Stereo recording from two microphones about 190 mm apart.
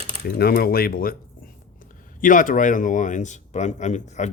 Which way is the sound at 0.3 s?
55° left (ahead or behind).